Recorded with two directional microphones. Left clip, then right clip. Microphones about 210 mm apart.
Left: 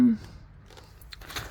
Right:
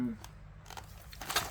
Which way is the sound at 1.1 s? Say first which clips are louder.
Left 1 dB; 50° left (ahead or behind).